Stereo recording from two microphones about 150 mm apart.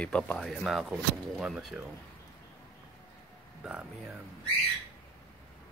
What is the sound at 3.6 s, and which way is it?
Speech, 10° right (ahead or behind).